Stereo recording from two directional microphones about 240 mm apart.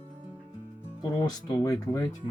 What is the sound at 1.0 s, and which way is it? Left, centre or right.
Speech, centre.